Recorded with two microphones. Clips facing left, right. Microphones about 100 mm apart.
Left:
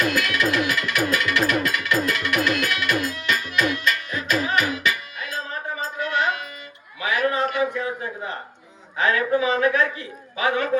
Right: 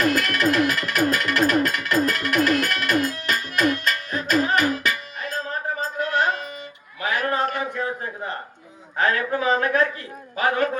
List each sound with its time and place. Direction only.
0.0 s music: 40° right (ahead or behind)
7.0 s a sound: 40° right (ahead or behind)
9.0 s speech: 40° right (ahead or behind)